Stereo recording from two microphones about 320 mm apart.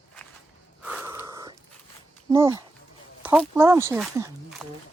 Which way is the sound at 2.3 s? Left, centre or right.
Centre.